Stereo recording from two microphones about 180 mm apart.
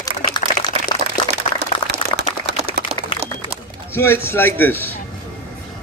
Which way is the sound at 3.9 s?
10° left (ahead or behind).